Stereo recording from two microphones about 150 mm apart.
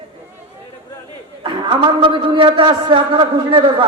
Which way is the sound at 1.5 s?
35° right (ahead or behind).